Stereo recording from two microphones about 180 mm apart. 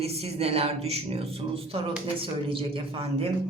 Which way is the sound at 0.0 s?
35° right (ahead or behind).